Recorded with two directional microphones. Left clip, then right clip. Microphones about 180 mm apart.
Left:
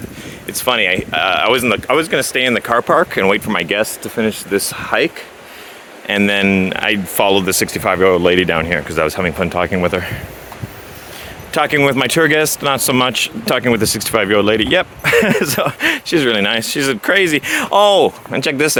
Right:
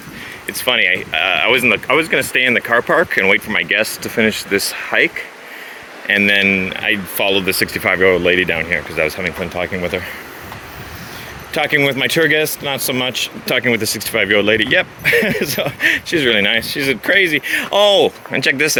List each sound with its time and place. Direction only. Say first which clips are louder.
0.4 s speech: even; 20° left (ahead or behind)
4.1 s speech: right 6 dB; centre (ahead or behind)
4.5 s speech: left 3 dB; 20° left (ahead or behind)
6.1 s speech: right 2 dB; 30° left (ahead or behind)
7.6 s speech: even; 20° left (ahead or behind); by 10.1 s 40° left (ahead or behind)
11.5 s speech: left 2 dB; 40° left (ahead or behind)
15.0 s speech: left 2 dB; 40° left (ahead or behind)
18.3 s speech: right 1 dB; 20° left (ahead or behind)